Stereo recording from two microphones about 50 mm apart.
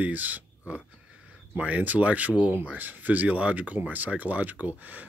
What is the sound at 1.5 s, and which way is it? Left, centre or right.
Speech, right.